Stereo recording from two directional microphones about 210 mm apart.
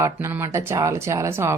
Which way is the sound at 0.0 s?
10° right (ahead or behind).